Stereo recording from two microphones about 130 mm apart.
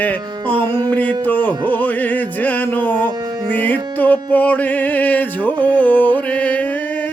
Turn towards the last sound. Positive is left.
turn(degrees=10)  # may be behind; listen again after turning